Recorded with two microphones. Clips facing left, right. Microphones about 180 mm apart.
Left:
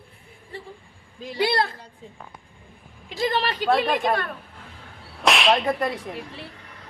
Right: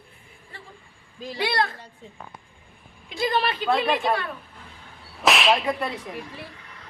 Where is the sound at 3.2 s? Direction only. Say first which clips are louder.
Even; 40° left (ahead or behind).